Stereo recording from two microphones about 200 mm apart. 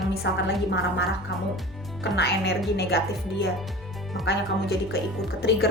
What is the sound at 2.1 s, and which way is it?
Speech, 55° left (ahead or behind).